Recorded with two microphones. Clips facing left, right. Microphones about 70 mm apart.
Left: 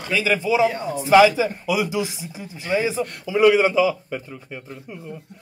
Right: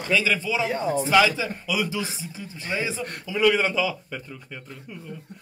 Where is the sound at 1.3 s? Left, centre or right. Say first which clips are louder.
Left 5 dB; left.